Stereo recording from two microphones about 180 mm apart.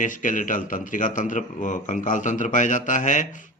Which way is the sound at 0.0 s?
45° left (ahead or behind).